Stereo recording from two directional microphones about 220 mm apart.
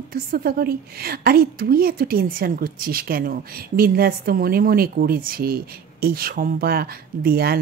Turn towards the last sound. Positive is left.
turn(degrees=-45)  # may be behind; listen again after turning